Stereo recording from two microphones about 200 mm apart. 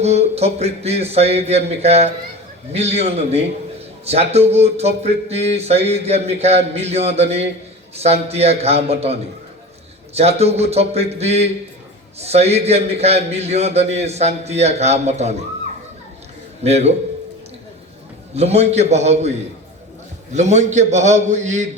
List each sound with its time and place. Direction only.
0.0 s a man's voice: 30° right (ahead or behind)
10.2 s a man's voice: 30° right (ahead or behind)
16.6 s a man's voice: 30° right (ahead or behind)
18.3 s a man's voice: 30° right (ahead or behind)
20.3 s a man's voice: 35° right (ahead or behind)